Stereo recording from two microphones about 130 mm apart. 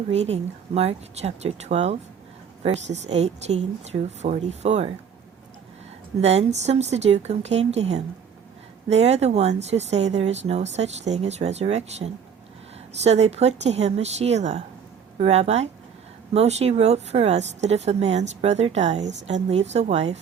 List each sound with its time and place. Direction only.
0.1 s a woman's voice: 55° right (ahead or behind)
6.1 s a woman's voice: 55° right (ahead or behind)